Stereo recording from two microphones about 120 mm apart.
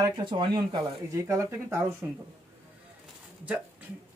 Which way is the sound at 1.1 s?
25° right (ahead or behind).